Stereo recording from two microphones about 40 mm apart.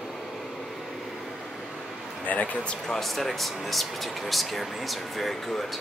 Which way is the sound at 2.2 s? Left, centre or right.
Left.